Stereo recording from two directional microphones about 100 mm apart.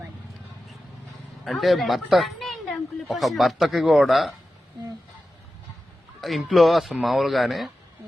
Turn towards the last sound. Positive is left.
turn(degrees=0)  # may be behind; listen again after turning